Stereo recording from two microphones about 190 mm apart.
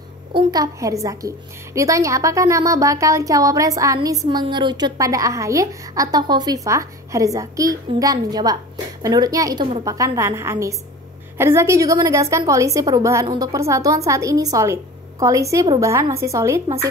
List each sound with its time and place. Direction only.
0.3 s a woman's voice: 25° right (ahead or behind)